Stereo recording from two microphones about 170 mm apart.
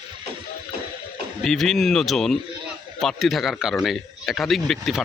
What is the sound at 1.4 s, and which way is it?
Speech, centre (ahead or behind).